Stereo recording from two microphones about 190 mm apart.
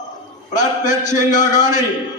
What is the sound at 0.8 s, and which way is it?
Speech, 40° left (ahead or behind).